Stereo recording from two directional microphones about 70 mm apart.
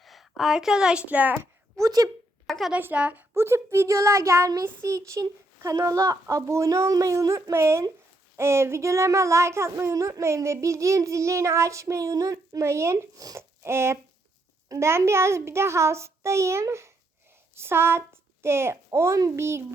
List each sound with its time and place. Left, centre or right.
0.0 s a woman's voice: centre; by 1.4 s right
1.4 s a sound: right
2.5 s speech: centre
2.7 s a woman's voice: right
3.3 s speech: right
7.5 s a child's voice: right
12.6 s a child's voice: right
13.1 s speech: right
13.6 s a child's voice: right